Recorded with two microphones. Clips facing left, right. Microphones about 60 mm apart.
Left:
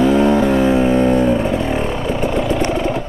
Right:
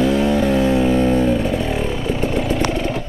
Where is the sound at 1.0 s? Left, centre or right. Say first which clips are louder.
Left 2 dB; centre.